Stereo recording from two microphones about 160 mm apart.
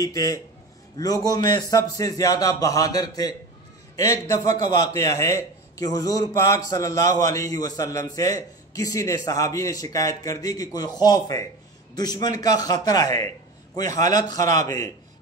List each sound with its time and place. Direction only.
0.0 s a man's voice: 20° left (ahead or behind)